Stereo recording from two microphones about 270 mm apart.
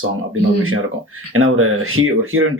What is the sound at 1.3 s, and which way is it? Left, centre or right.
Speech, right.